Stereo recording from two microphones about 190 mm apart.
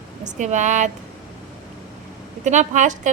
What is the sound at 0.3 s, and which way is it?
Speech, 40° right (ahead or behind).